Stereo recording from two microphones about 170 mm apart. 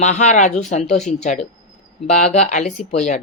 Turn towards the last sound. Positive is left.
turn(degrees=40)  # may be behind; listen again after turning